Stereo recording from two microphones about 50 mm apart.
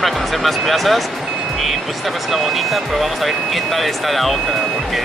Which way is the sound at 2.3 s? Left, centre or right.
Centre.